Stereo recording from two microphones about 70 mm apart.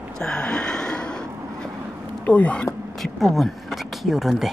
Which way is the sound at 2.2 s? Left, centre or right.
Left.